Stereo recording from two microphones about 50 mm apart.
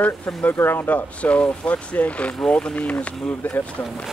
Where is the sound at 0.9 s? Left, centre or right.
Left.